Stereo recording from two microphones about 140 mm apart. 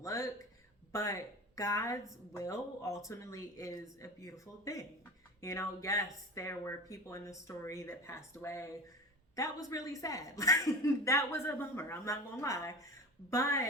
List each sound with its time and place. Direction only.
0.0 s speech: 20° left (ahead or behind)
1.5 s speech: 25° left (ahead or behind)